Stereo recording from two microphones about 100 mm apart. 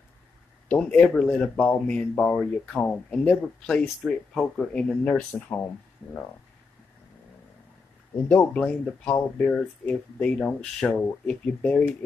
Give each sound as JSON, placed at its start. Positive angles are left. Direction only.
{"t": 0.7, "sound": "speech", "side_deg": 10}
{"t": 8.3, "sound": "speech", "side_deg": 15}